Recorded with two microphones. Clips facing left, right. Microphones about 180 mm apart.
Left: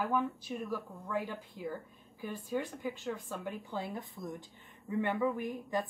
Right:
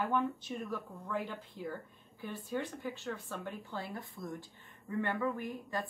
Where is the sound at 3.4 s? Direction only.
Centre (ahead or behind).